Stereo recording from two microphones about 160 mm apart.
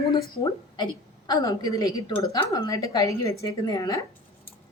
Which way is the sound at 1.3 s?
25° left (ahead or behind).